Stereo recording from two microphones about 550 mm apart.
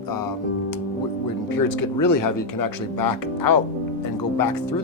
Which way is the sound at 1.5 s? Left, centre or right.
Left.